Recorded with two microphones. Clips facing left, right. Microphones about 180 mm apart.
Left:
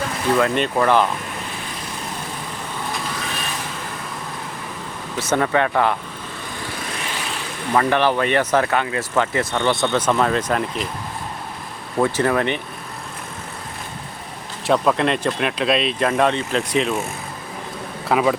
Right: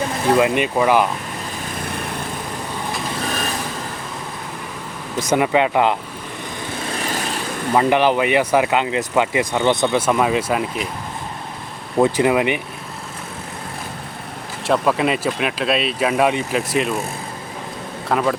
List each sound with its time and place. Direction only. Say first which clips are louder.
0.3 s speech: right 1 dB; 15° right (ahead or behind)
5.1 s speech: right 2 dB; 15° right (ahead or behind)
7.0 s vehicle: right 7 dB; 40° right (ahead or behind)
7.7 s speech: right 2 dB; 15° right (ahead or behind)
11.9 s speech: right 3 dB; 15° right (ahead or behind)
14.7 s speech: even; 5° right (ahead or behind)
18.1 s speech: left 1 dB; 5° left (ahead or behind)